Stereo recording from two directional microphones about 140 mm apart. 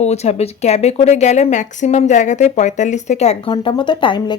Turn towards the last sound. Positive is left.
turn(degrees=35)  # may be behind; listen again after turning